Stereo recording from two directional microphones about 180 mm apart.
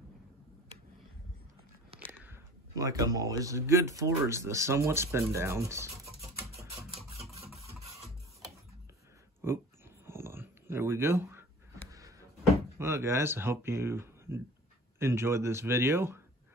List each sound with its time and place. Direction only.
1.9 s biting: 35° right (ahead or behind)
2.2 s speech: 15° right (ahead or behind)
7.6 s printer: 35° right (ahead or behind)
9.4 s a sound: 15° right (ahead or behind)
12.7 s speech: 15° right (ahead or behind)